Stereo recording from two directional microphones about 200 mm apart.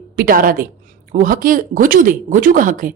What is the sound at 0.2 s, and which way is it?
A woman's voice, 45° right (ahead or behind).